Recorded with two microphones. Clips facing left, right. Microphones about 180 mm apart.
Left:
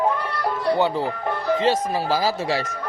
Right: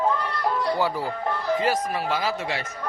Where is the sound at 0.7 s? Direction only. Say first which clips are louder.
Left 4 dB; 25° left (ahead or behind).